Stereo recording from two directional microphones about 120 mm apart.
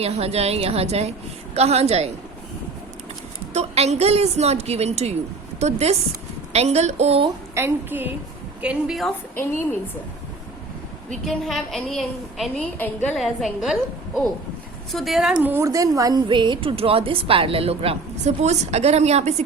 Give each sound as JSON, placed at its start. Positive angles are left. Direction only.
{"t": 0.0, "sound": "a woman's voice", "side_deg": -60}
{"t": 3.5, "sound": "a woman's voice", "side_deg": -65}
{"t": 7.5, "sound": "a woman's voice", "side_deg": -20}
{"t": 8.6, "sound": "a woman's voice", "side_deg": -5}
{"t": 9.3, "sound": "a woman's voice", "side_deg": 20}
{"t": 11.1, "sound": "a woman's voice", "side_deg": 0}
{"t": 13.1, "sound": "a woman's voice", "side_deg": 0}
{"t": 14.9, "sound": "a woman's voice", "side_deg": 0}
{"t": 15.4, "sound": "a woman's voice", "side_deg": -15}
{"t": 15.6, "sound": "a woman's voice", "side_deg": -30}